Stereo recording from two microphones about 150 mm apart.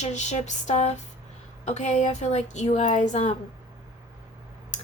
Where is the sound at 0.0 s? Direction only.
50° left (ahead or behind).